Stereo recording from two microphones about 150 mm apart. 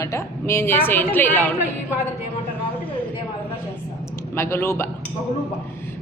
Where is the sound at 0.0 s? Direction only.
20° left (ahead or behind).